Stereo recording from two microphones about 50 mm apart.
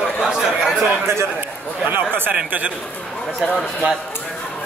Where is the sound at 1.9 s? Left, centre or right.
Right.